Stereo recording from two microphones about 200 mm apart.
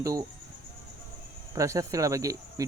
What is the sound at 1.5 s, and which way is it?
Speech, 15° right (ahead or behind).